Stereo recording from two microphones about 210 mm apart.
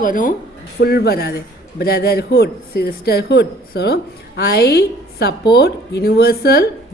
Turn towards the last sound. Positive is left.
turn(degrees=45)  # may be behind; listen again after turning